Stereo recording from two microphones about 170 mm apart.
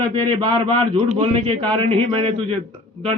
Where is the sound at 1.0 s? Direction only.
40° right (ahead or behind).